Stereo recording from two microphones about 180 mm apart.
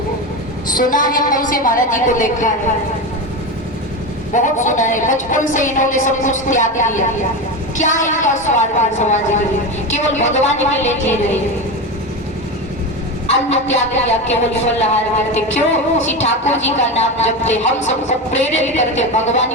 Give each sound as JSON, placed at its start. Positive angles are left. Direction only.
{"t": 0.8, "sound": "a woman's voice", "side_deg": 50}
{"t": 4.4, "sound": "a woman's voice", "side_deg": 45}
{"t": 13.5, "sound": "speech", "side_deg": 35}